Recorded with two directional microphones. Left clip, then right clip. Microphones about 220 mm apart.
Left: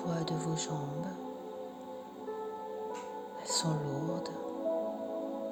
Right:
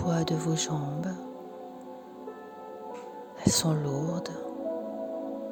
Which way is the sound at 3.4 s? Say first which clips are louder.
Right 7 dB; 20° right (ahead or behind).